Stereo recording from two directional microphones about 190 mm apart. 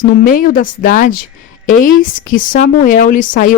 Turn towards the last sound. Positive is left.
turn(degrees=45)  # may be behind; listen again after turning